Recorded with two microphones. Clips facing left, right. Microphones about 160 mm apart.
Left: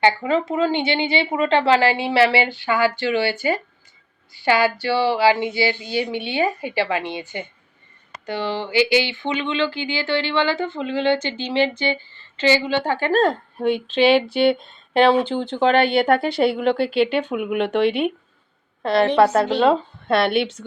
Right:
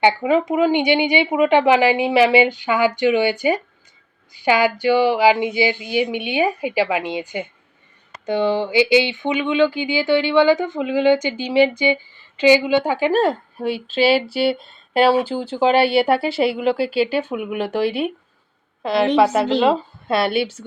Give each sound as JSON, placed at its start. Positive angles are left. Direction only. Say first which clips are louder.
{"t": 0.0, "sound": "speech", "louder": "right 2 dB", "side_deg": -15}